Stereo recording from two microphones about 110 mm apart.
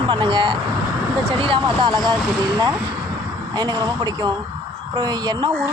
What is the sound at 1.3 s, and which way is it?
Speech, 50° right (ahead or behind).